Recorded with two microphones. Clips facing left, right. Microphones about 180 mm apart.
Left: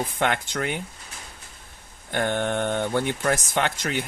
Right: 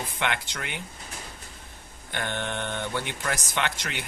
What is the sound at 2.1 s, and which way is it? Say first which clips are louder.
Speech: left 7 dB; 45° left (ahead or behind).